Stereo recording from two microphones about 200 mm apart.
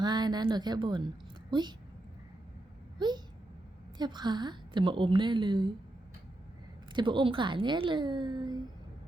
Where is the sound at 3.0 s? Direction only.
20° right (ahead or behind).